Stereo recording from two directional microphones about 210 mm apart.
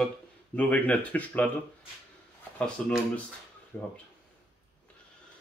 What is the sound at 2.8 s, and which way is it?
Speech, 5° left (ahead or behind).